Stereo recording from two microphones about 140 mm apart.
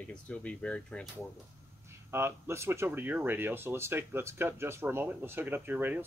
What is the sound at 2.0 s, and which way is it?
Speech, 15° right (ahead or behind).